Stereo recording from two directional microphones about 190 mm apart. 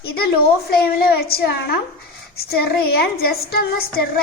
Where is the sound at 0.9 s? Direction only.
55° left (ahead or behind).